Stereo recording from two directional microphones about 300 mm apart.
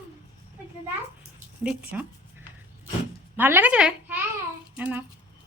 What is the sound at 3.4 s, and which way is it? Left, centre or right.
A woman's voice, centre.